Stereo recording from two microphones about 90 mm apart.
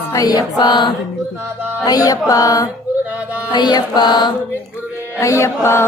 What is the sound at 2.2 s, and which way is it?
Mantra, 40° left (ahead or behind).